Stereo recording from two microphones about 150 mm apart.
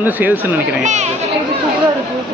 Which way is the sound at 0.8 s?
50° right (ahead or behind).